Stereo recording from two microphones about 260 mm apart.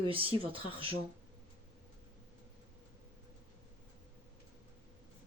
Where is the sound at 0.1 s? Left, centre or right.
Right.